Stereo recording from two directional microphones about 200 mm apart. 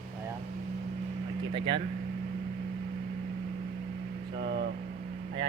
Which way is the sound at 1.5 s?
25° right (ahead or behind).